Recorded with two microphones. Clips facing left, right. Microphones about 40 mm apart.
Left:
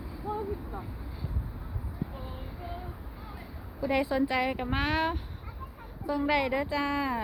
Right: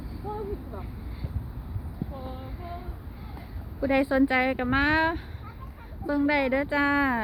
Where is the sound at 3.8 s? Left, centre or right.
Centre.